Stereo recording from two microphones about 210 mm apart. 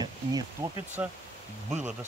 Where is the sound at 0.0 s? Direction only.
15° right (ahead or behind).